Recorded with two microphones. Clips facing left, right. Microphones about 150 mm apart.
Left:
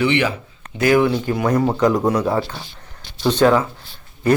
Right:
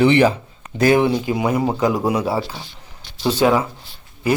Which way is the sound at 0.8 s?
25° right (ahead or behind).